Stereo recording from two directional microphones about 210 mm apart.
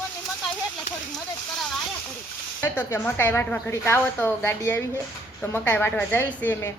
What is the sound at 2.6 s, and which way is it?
A woman's voice, 10° left (ahead or behind).